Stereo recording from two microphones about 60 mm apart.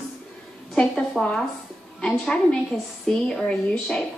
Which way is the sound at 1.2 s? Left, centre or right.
Centre.